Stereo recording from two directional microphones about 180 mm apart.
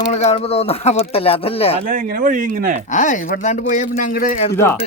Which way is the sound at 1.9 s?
50° right (ahead or behind).